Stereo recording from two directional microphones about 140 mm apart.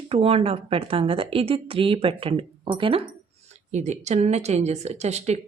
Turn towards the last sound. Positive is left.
turn(degrees=-50)  # may be behind; listen again after turning